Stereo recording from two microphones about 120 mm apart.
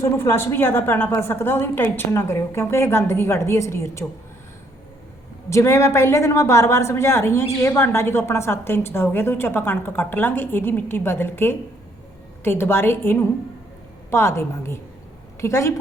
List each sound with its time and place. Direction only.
0.0 s a woman's voice: 20° left (ahead or behind)
5.5 s a woman's voice: 25° left (ahead or behind)